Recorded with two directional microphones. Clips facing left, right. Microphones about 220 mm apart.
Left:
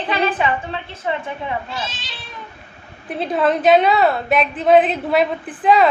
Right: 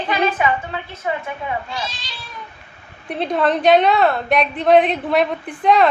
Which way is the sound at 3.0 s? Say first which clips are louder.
Even; 5° left (ahead or behind).